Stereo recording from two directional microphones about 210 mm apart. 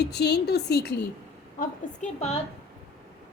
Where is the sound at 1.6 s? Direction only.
35° left (ahead or behind).